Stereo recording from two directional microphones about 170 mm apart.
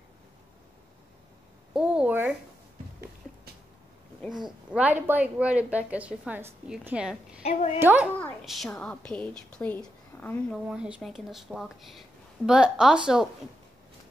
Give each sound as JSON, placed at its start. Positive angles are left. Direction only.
{"t": 1.7, "sound": "a sound", "side_deg": -5}
{"t": 4.6, "sound": "a woman's voice", "side_deg": -10}
{"t": 7.4, "sound": "a child's voice", "side_deg": 40}
{"t": 7.8, "sound": "a woman's voice", "side_deg": -10}
{"t": 10.7, "sound": "a woman's voice", "side_deg": -5}